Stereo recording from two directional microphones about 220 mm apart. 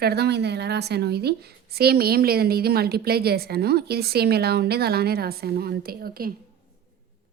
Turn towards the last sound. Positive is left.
turn(degrees=-45)  # may be behind; listen again after turning